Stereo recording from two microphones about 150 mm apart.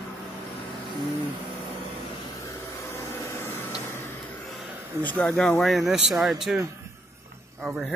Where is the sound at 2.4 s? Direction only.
20° left (ahead or behind).